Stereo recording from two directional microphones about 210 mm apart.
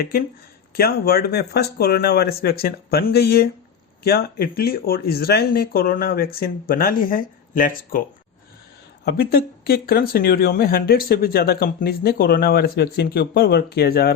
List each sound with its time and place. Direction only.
0.0 s speech: 45° left (ahead or behind)
9.0 s speech: 50° left (ahead or behind)